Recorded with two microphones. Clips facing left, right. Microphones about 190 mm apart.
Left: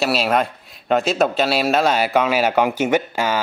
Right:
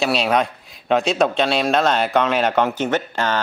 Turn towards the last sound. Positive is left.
turn(degrees=10)  # may be behind; listen again after turning